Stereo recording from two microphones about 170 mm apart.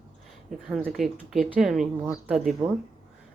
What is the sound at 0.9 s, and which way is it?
Speech, centre (ahead or behind).